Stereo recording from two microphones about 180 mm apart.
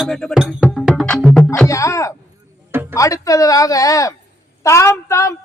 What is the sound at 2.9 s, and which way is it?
A woman's voice, 20° left (ahead or behind).